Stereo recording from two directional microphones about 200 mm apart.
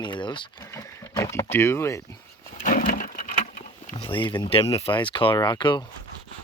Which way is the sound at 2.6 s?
45° left (ahead or behind).